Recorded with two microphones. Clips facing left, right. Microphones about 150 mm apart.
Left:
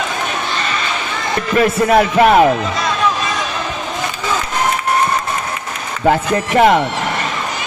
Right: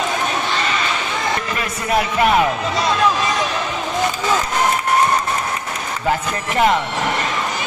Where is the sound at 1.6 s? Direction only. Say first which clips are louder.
Left 11 dB; 45° left (ahead or behind).